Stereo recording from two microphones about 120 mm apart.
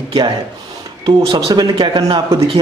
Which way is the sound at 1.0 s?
50° right (ahead or behind).